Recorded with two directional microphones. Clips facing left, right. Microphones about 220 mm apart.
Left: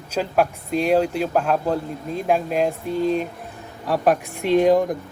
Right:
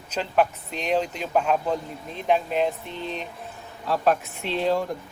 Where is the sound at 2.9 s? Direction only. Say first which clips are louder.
Left 12 dB; 40° left (ahead or behind).